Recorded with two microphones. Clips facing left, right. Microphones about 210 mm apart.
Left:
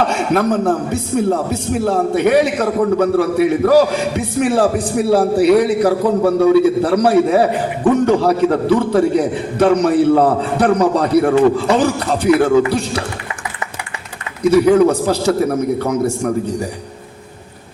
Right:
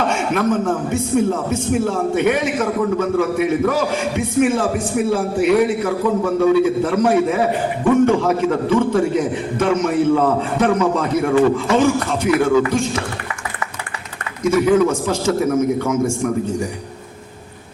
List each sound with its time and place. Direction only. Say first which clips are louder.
0.3 s a man's voice: left 4 dB; 40° left (ahead or behind)
14.4 s a man's voice: left 4 dB; 35° left (ahead or behind)